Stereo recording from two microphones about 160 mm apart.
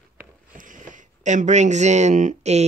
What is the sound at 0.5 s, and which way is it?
Speech, 55° right (ahead or behind).